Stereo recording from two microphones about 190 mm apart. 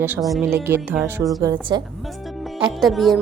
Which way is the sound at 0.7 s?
10° right (ahead or behind).